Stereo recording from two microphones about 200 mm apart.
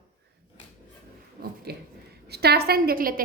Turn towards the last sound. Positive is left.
turn(degrees=-45)  # may be behind; listen again after turning